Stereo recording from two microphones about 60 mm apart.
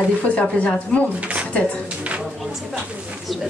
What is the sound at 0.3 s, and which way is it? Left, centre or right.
Speech, left.